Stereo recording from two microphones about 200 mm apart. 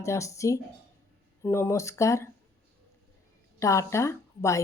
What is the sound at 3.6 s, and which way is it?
A woman's voice, 15° left (ahead or behind).